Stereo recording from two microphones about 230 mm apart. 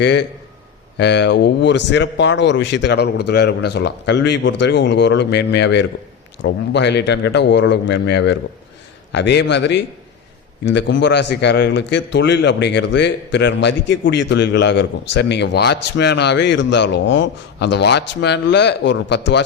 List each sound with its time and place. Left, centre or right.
0.0 s a man's voice: left